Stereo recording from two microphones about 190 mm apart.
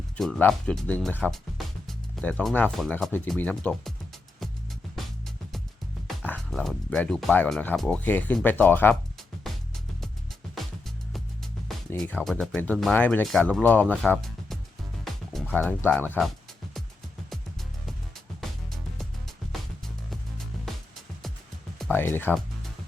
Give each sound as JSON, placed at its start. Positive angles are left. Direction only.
{"t": 0.2, "sound": "speech", "side_deg": 5}
{"t": 6.1, "sound": "speech", "side_deg": 5}
{"t": 10.5, "sound": "music", "side_deg": 0}
{"t": 11.9, "sound": "speech", "side_deg": 0}
{"t": 15.0, "sound": "music", "side_deg": 0}
{"t": 16.0, "sound": "speech", "side_deg": -5}
{"t": 20.1, "sound": "music", "side_deg": 0}
{"t": 21.9, "sound": "speech", "side_deg": 10}